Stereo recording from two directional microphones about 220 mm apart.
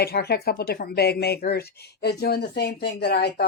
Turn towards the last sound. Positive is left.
turn(degrees=50)  # may be behind; listen again after turning